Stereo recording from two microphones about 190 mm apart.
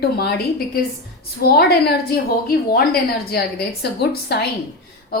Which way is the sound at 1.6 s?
55° left (ahead or behind).